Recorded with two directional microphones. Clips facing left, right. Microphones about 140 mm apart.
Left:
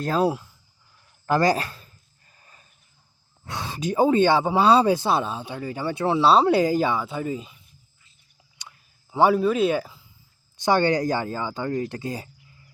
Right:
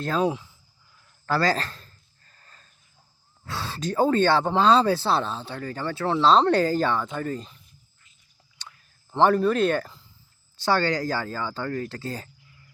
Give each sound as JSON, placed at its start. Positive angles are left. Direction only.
{"t": 0.0, "sound": "speech", "side_deg": 5}
{"t": 1.3, "sound": "a sound", "side_deg": 15}
{"t": 3.4, "sound": "speech", "side_deg": 15}
{"t": 8.6, "sound": "a sound", "side_deg": 15}
{"t": 9.1, "sound": "speech", "side_deg": 5}
{"t": 10.6, "sound": "speech", "side_deg": 15}